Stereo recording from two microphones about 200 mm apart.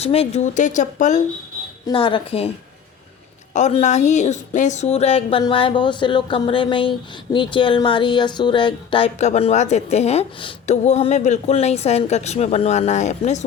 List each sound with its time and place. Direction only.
0.0 s speech: 30° left (ahead or behind)
1.9 s speech: 25° left (ahead or behind)
3.5 s speech: 35° left (ahead or behind)